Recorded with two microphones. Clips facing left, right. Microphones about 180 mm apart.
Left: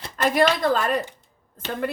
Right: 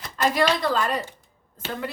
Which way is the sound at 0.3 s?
50° left (ahead or behind).